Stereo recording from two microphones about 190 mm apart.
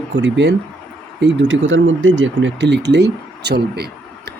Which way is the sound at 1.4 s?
80° right.